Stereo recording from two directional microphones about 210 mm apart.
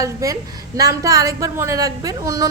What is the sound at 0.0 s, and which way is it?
A woman's voice, 15° right (ahead or behind).